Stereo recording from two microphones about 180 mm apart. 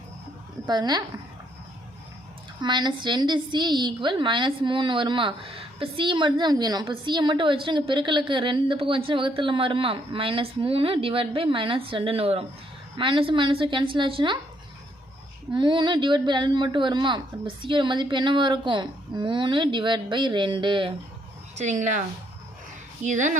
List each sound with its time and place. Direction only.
0.7 s a woman's voice: 25° right (ahead or behind)
2.6 s a woman's voice: 25° right (ahead or behind)
15.5 s a woman's voice: 25° right (ahead or behind)
21.5 s a woman's voice: 40° right (ahead or behind)
23.0 s a woman's voice: 45° right (ahead or behind)